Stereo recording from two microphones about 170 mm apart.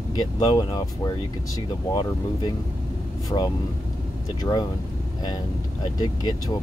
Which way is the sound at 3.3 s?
25° left (ahead or behind).